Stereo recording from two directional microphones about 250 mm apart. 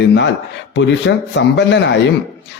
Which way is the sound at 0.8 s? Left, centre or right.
Left.